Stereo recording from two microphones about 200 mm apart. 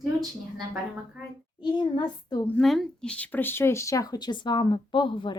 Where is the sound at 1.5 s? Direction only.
20° left (ahead or behind).